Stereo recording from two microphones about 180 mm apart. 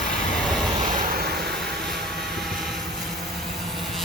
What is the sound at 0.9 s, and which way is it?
Vehicle, 55° right (ahead or behind).